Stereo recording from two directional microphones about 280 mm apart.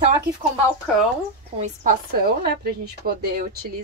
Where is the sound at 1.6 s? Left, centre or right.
Right.